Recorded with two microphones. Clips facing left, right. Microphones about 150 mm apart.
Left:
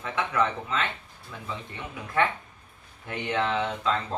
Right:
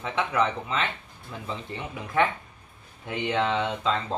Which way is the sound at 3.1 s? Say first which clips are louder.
Right 2 dB; 20° right (ahead or behind).